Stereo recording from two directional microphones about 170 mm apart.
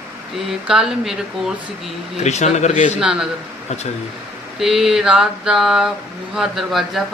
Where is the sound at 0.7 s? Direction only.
5° right (ahead or behind).